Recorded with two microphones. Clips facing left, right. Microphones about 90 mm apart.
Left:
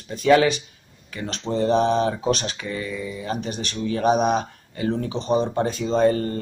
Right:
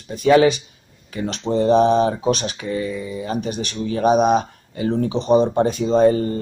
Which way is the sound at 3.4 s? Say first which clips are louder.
Right 3 dB; 15° right (ahead or behind).